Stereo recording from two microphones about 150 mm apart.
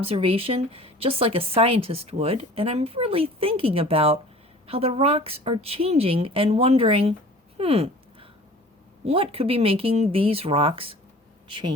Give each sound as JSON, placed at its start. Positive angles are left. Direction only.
{"t": 0.0, "sound": "speech", "side_deg": -40}
{"t": 7.6, "sound": "a sound", "side_deg": -40}
{"t": 9.0, "sound": "speech", "side_deg": -40}